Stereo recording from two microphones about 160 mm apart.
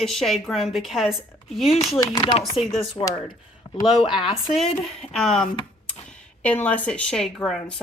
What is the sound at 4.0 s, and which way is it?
Speech, 30° left (ahead or behind).